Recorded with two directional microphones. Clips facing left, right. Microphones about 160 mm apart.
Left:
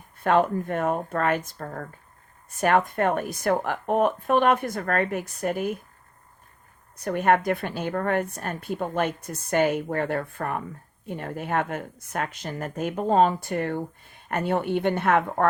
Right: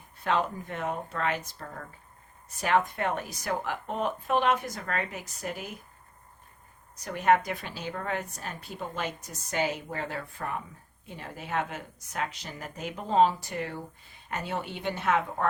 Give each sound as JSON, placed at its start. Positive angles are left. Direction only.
{"t": 0.2, "sound": "a woman's voice", "side_deg": 55}
{"t": 6.9, "sound": "a woman's voice", "side_deg": 55}